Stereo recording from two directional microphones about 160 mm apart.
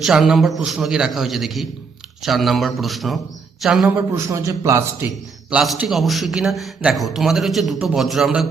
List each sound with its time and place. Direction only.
0.0 s a man's voice: centre (ahead or behind)
3.8 s a man's voice: 15° right (ahead or behind)
5.5 s a man's voice: 5° right (ahead or behind)